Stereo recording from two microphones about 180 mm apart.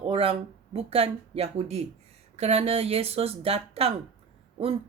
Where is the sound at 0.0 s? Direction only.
30° right (ahead or behind).